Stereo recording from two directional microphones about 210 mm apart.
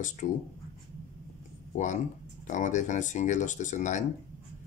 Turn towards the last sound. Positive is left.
turn(degrees=35)  # may be behind; listen again after turning